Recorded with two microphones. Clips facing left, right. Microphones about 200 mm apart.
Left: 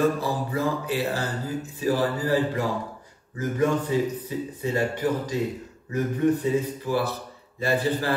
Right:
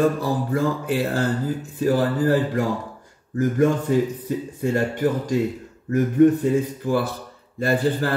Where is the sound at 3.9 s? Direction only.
50° right (ahead or behind).